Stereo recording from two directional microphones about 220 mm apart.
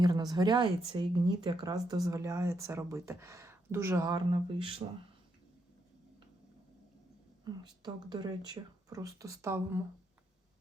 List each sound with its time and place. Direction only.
0.0 s speech: 20° right (ahead or behind)
7.8 s speech: 20° right (ahead or behind)